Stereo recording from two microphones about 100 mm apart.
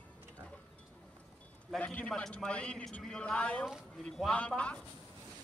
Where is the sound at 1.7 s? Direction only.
15° left (ahead or behind).